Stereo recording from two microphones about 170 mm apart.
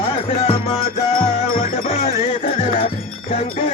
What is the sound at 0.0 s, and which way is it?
Music, 35° left (ahead or behind).